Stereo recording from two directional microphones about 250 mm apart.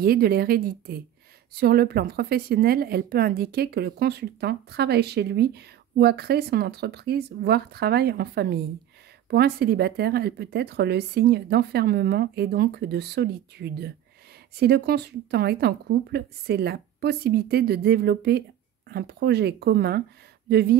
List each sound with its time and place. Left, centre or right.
0.0 s a woman's voice: right